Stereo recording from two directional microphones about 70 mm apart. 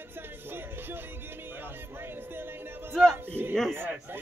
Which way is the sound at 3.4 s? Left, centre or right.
Right.